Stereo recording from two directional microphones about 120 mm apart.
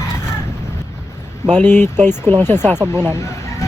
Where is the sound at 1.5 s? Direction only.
15° left (ahead or behind).